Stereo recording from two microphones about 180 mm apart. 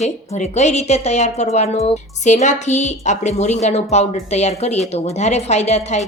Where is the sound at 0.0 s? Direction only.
40° left (ahead or behind).